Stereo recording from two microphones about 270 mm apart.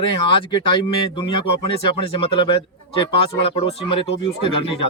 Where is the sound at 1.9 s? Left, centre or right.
Centre.